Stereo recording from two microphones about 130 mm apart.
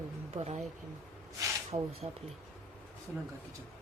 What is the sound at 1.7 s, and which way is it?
Speech, 40° right (ahead or behind).